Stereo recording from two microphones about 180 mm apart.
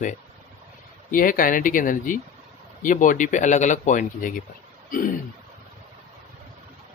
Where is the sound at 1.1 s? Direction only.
50° left (ahead or behind).